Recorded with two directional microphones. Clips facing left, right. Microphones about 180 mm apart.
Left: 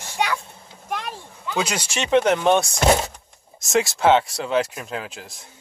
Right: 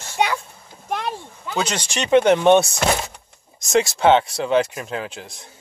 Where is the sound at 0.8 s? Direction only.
30° right (ahead or behind).